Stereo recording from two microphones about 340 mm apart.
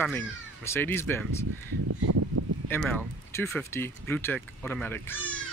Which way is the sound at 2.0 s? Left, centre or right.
Right.